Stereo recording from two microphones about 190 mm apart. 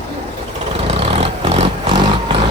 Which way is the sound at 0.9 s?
30° right (ahead or behind).